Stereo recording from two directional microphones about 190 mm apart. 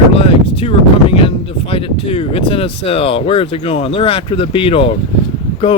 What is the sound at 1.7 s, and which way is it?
Speech, 30° left (ahead or behind).